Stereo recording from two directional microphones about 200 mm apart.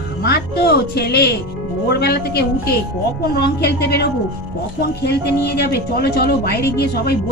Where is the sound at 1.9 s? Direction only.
55° left (ahead or behind).